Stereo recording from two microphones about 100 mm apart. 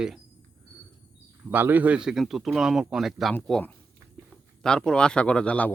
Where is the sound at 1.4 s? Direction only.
20° right (ahead or behind).